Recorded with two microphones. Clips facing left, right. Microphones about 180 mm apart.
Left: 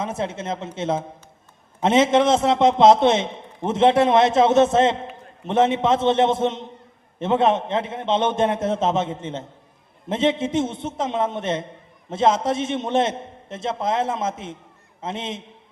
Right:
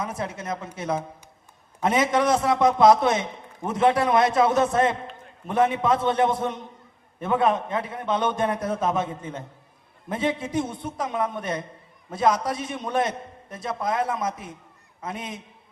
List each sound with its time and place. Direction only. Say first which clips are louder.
0.0 s a man's voice: left 4 dB; 25° left (ahead or behind)